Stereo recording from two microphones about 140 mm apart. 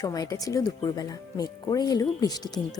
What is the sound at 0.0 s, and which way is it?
A woman's voice, 25° left (ahead or behind).